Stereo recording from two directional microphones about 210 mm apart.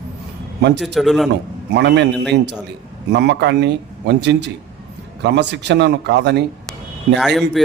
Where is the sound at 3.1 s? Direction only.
55° right (ahead or behind).